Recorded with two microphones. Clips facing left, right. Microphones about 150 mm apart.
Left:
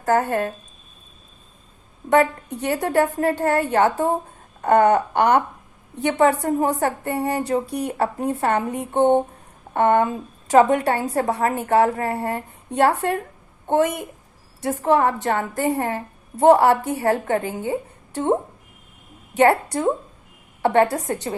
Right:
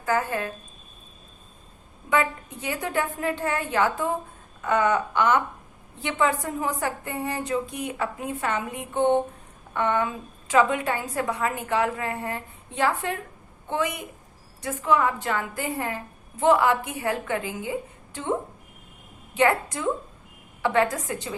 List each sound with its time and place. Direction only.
0.0 s a woman's voice: 45° left (ahead or behind)
2.7 s a woman's voice: 40° left (ahead or behind)
4.6 s a sound: 55° left (ahead or behind)
6.0 s a woman's voice: 40° left (ahead or behind)
19.4 s a woman's voice: 40° left (ahead or behind)